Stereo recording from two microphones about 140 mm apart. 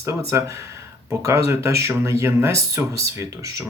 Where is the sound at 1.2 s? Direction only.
20° right (ahead or behind).